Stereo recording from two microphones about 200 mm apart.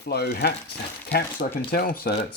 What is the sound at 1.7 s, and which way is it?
Speech, 50° left (ahead or behind).